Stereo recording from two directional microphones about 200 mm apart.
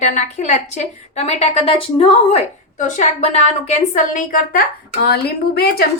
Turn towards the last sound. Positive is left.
turn(degrees=50)  # may be behind; listen again after turning